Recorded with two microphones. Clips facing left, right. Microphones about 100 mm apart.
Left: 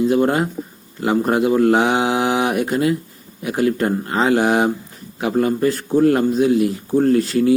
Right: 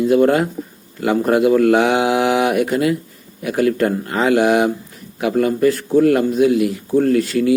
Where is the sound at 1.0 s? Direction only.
25° left (ahead or behind).